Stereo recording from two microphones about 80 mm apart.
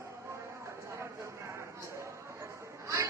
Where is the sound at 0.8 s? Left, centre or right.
Right.